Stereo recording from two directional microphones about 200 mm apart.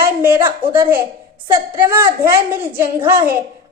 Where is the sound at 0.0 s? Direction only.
10° right (ahead or behind).